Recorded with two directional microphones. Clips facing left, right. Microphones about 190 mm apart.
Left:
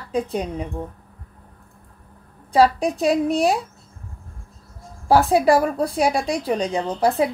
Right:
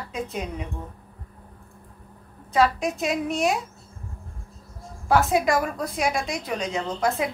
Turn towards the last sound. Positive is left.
turn(degrees=35)  # may be behind; listen again after turning